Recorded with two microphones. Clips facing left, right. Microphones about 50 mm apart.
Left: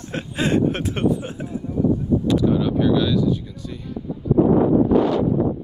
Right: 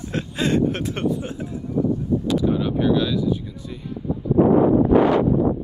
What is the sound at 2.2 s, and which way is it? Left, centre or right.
Speech, centre.